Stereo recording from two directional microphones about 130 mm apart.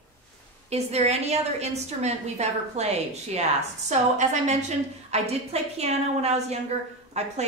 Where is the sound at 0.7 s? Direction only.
55° right (ahead or behind).